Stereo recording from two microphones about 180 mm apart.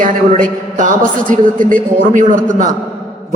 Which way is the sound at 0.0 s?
50° right (ahead or behind).